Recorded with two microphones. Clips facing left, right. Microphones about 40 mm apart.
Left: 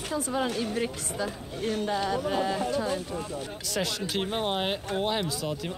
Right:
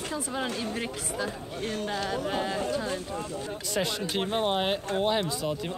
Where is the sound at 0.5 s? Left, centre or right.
Right.